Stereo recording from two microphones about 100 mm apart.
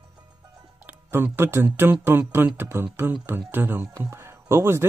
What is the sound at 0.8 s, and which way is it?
Speech, 20° right (ahead or behind).